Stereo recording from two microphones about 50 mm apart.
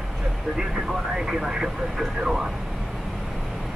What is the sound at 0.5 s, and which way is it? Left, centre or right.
Speech, centre.